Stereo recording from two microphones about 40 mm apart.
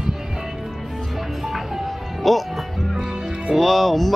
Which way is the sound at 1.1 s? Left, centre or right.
Centre.